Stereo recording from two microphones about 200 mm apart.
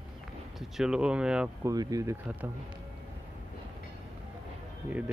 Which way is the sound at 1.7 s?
15° right (ahead or behind).